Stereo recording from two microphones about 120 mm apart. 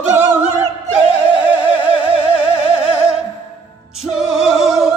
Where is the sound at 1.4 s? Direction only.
10° right (ahead or behind).